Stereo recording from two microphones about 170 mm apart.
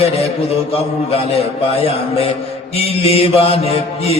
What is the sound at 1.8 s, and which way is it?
Mantra, 35° left (ahead or behind).